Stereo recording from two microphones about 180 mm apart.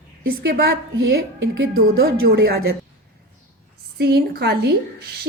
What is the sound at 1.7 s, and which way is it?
Speech, 60° right (ahead or behind).